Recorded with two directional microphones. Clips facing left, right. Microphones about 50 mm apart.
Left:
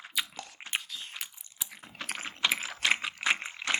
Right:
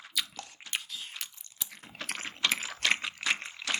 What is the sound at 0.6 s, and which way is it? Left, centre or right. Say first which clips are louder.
Chewing: left 2 dB; centre.